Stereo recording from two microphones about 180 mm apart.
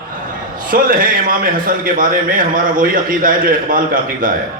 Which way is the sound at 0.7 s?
50° right (ahead or behind).